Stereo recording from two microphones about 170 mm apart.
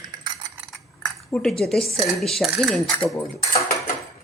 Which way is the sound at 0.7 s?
5° left (ahead or behind).